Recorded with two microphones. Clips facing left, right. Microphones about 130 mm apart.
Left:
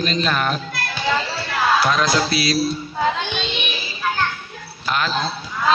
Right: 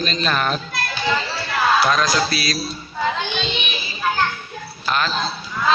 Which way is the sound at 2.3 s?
25° left (ahead or behind).